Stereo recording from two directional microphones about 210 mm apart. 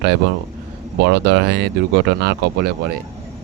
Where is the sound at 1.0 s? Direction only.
50° right (ahead or behind).